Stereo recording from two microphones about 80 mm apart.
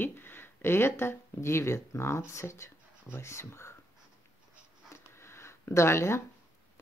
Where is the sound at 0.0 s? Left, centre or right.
Left.